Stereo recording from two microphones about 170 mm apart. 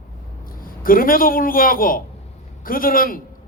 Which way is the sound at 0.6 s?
55° left (ahead or behind).